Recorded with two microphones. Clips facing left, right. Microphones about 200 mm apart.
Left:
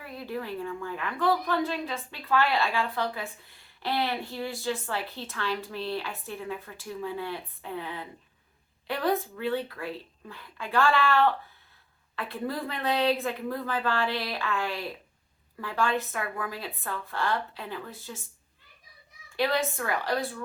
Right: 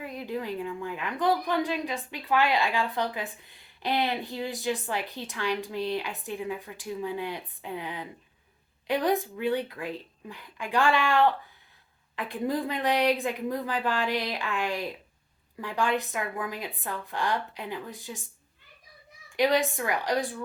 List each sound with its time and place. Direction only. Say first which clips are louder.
0.0 s a woman's voice: right 2 dB; 15° right (ahead or behind)
19.4 s a woman's voice: right 3 dB; 15° right (ahead or behind)